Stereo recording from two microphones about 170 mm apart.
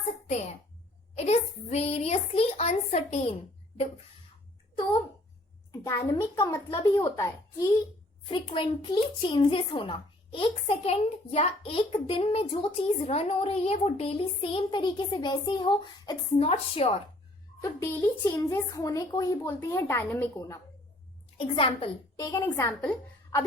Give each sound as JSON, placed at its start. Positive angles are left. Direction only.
{"t": 0.3, "sound": "a child's voice", "side_deg": 40}
{"t": 4.8, "sound": "a child's voice", "side_deg": 30}
{"t": 6.1, "sound": "a child's voice", "side_deg": 20}
{"t": 8.3, "sound": "a child's voice", "side_deg": 30}
{"t": 17.6, "sound": "a woman's voice", "side_deg": 15}
{"t": 21.3, "sound": "a child's voice", "side_deg": 30}